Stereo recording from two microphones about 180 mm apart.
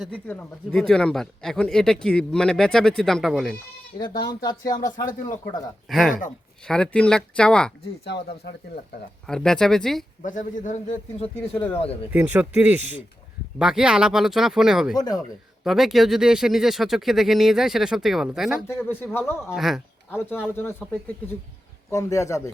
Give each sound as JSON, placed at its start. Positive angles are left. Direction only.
{"t": 0.0, "sound": "a man's voice", "side_deg": 10}
{"t": 4.0, "sound": "speech", "side_deg": 25}
{"t": 5.9, "sound": "a man's voice", "side_deg": 0}
{"t": 8.0, "sound": "speech", "side_deg": 70}
{"t": 9.2, "sound": "a man's voice", "side_deg": 5}
{"t": 10.2, "sound": "a man's voice", "side_deg": 45}
{"t": 12.1, "sound": "a man's voice", "side_deg": -10}
{"t": 14.9, "sound": "speech", "side_deg": 20}
{"t": 15.6, "sound": "a man's voice", "side_deg": 0}
{"t": 18.7, "sound": "a man's voice", "side_deg": 10}
{"t": 19.5, "sound": "a man's voice", "side_deg": 0}
{"t": 20.1, "sound": "a man's voice", "side_deg": 10}
{"t": 21.8, "sound": "a man's voice", "side_deg": 15}